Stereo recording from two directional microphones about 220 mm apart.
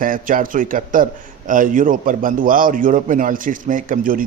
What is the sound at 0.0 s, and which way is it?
A man's voice, 40° right (ahead or behind).